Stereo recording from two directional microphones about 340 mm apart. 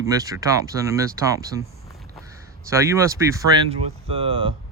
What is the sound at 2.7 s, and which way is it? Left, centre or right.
Speech, centre.